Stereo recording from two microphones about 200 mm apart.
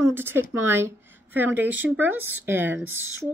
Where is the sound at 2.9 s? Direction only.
90° right.